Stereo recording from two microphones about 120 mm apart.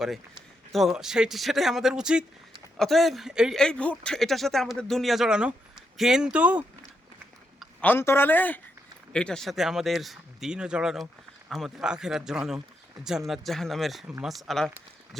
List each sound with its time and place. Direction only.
0.0 s speech: centre (ahead or behind)
3.6 s speech: 10° left (ahead or behind); by 6.7 s 10° right (ahead or behind)
7.8 s a man's voice: 15° left (ahead or behind); by 15.3 s centre (ahead or behind)